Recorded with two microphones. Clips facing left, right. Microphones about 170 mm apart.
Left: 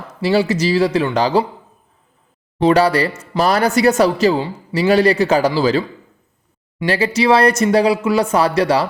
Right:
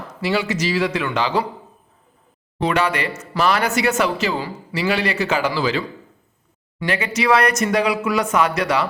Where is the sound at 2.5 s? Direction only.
35° left (ahead or behind).